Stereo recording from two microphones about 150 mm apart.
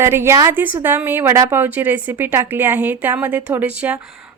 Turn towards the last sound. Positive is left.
turn(degrees=-5)  # may be behind; listen again after turning